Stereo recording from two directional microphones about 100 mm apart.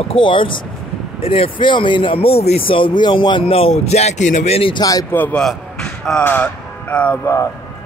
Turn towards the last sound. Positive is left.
turn(degrees=30)  # may be behind; listen again after turning